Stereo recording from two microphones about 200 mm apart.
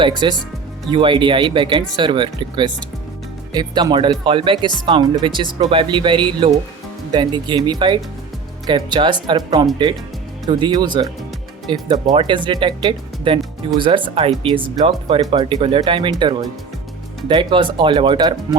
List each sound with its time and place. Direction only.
0.2 s speech: 20° right (ahead or behind)